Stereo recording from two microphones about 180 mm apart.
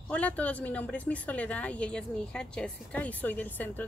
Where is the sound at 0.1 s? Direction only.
10° left (ahead or behind).